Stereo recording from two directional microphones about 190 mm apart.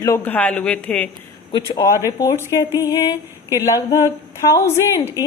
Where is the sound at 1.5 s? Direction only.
20° left (ahead or behind).